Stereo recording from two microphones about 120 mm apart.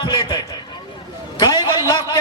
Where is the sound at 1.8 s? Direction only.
30° left (ahead or behind).